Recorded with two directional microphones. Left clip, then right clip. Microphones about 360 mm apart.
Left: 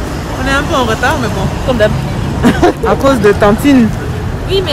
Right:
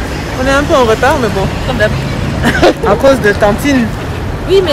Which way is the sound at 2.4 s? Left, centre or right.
Left.